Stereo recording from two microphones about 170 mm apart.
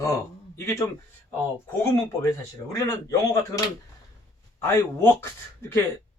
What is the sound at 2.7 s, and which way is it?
Speech, 20° left (ahead or behind).